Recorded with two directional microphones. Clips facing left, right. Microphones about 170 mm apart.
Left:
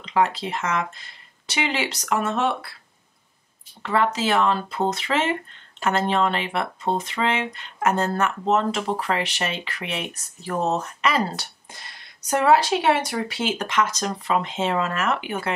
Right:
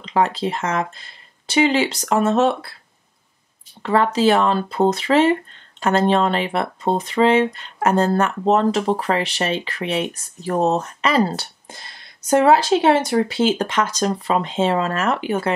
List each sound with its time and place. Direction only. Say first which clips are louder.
0.0 s speech: right 3 dB; 35° right (ahead or behind)
3.8 s speech: right 6 dB; 35° right (ahead or behind)